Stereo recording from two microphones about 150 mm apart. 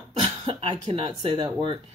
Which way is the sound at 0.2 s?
35° right (ahead or behind).